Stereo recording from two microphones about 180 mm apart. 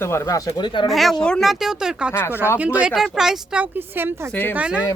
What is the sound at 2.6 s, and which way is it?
Speech, 5° right (ahead or behind).